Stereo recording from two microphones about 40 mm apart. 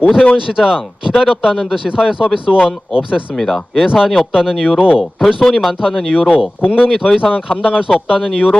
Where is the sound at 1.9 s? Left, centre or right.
Centre.